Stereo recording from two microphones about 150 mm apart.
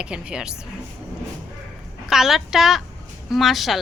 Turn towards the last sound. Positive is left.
turn(degrees=0)  # may be behind; listen again after turning